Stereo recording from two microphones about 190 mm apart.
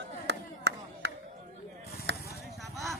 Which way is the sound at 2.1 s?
70° right (ahead or behind).